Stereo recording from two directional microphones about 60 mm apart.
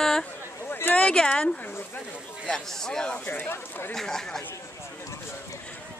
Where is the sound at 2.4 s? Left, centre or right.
Centre.